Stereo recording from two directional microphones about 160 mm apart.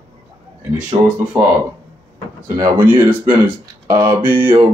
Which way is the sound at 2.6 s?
15° right (ahead or behind).